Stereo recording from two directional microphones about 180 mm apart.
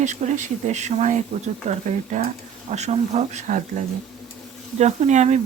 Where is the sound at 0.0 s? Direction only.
40° right (ahead or behind).